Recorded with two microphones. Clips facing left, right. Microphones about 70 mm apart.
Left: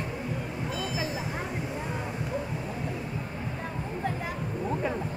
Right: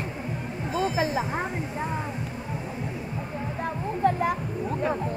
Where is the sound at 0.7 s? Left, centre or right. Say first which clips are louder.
Right 9 dB; right.